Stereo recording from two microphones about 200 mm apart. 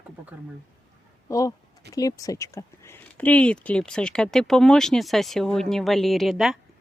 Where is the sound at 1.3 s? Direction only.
15° left (ahead or behind).